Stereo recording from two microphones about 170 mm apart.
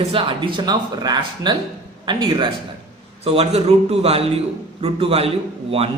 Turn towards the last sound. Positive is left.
turn(degrees=-35)  # may be behind; listen again after turning